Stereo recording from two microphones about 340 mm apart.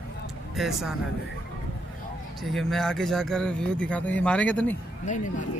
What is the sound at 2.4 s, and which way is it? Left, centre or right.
Speech, centre.